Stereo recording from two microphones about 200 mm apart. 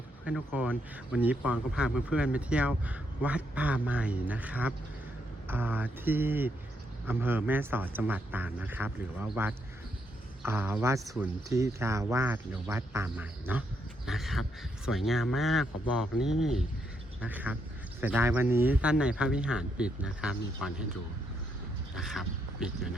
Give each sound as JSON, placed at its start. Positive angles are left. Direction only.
{"t": 0.3, "sound": "speech", "side_deg": -5}
{"t": 21.9, "sound": "speech", "side_deg": 0}